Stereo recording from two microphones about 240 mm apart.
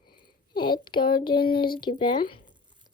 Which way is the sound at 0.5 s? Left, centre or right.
Centre.